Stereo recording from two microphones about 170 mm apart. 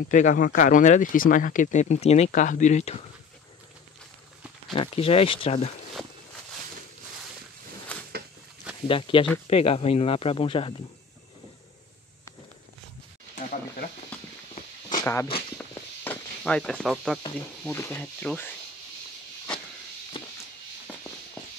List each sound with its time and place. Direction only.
0.1 s speech: 50° left (ahead or behind)
4.7 s speech: 35° left (ahead or behind)
7.9 s a sound: 10° left (ahead or behind)
8.8 s speech: 30° left (ahead or behind)
14.9 s walk: 15° left (ahead or behind)
15.5 s a sound: 10° left (ahead or behind)
17.7 s speech: 15° left (ahead or behind)